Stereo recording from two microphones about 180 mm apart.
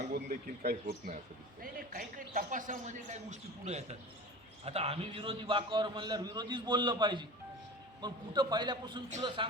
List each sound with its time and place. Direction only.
0.0 s a man's voice: 50° right (ahead or behind); by 9.5 s 30° right (ahead or behind)